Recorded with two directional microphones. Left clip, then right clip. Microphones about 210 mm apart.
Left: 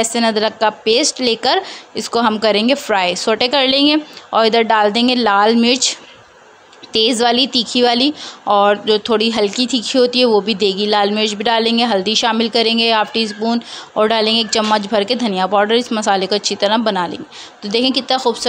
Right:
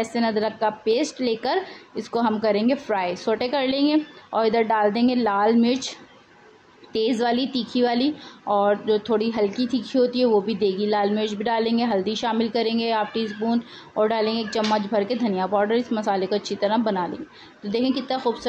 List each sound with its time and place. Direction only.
0.0 s a woman's voice: 30° left (ahead or behind)